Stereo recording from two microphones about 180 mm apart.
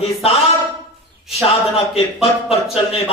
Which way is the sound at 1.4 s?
35° left (ahead or behind).